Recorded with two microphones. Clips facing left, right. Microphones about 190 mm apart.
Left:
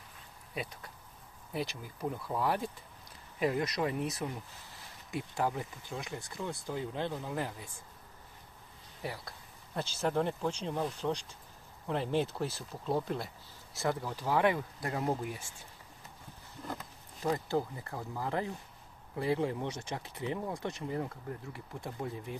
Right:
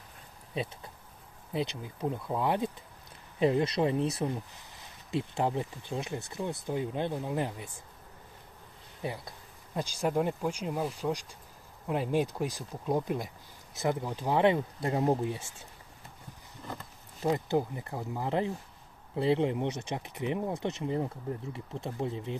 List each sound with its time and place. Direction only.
0.5 s speech: 25° right (ahead or behind)
9.0 s speech: 20° right (ahead or behind)
17.2 s speech: 20° right (ahead or behind)